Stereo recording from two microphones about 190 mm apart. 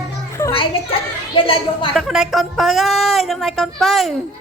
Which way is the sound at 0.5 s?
30° left (ahead or behind).